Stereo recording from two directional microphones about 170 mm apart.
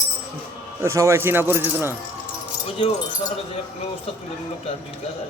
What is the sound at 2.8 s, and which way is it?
Speech, 30° left (ahead or behind).